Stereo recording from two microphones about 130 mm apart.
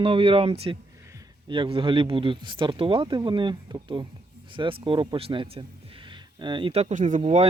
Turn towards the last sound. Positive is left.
turn(degrees=-60)  # may be behind; listen again after turning